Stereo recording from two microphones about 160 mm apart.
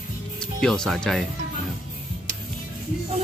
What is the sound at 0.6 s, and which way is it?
Speech, 5° left (ahead or behind).